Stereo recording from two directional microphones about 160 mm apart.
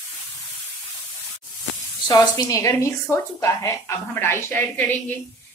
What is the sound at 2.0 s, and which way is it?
A woman's voice, 25° left (ahead or behind).